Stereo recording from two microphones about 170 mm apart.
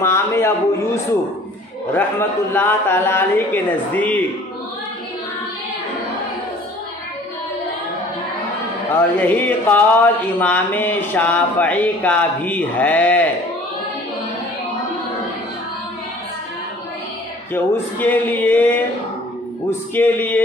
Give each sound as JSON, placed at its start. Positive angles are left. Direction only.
{"t": 0.0, "sound": "speech", "side_deg": 15}
{"t": 2.0, "sound": "speech", "side_deg": 15}
{"t": 8.9, "sound": "speech", "side_deg": 10}
{"t": 17.5, "sound": "speech", "side_deg": 10}
{"t": 19.9, "sound": "speech", "side_deg": 10}